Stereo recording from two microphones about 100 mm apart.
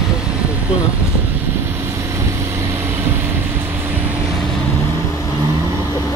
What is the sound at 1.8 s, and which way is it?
Vehicle, 30° right (ahead or behind).